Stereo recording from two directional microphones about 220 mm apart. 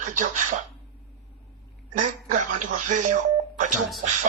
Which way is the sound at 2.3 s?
35° right (ahead or behind).